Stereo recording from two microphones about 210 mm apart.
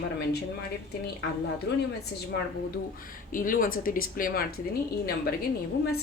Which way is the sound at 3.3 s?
40° left (ahead or behind).